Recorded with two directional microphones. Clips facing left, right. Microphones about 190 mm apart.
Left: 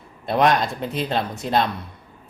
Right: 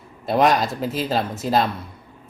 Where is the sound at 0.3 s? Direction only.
5° right (ahead or behind).